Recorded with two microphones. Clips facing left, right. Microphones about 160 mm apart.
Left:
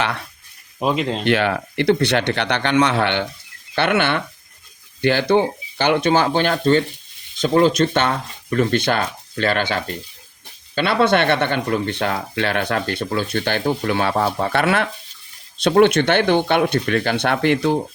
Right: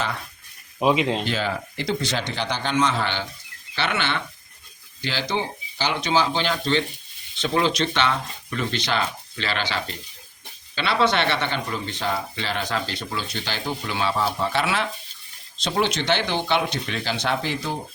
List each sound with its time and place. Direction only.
0.8 s speech: centre (ahead or behind)
1.2 s speech: 65° left (ahead or behind)